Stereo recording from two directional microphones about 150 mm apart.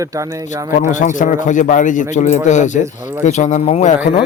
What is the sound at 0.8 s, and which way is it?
A man's voice, 55° left (ahead or behind).